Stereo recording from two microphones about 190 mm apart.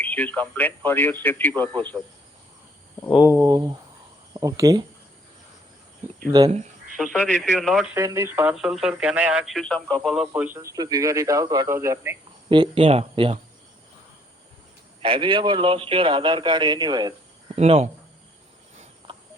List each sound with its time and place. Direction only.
0.0 s a man's voice: 10° left (ahead or behind)
3.1 s speech: 10° right (ahead or behind)
6.5 s a sound: 40° right (ahead or behind)
6.9 s speech: centre (ahead or behind)
7.9 s speech: 15° right (ahead or behind)
12.5 s speech: 30° right (ahead or behind)
15.0 s speech: 25° right (ahead or behind)
17.5 s speech: 35° right (ahead or behind)
19.0 s cricket: 25° right (ahead or behind)